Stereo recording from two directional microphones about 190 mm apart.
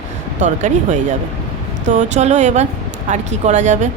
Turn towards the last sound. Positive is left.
turn(degrees=-40)  # may be behind; listen again after turning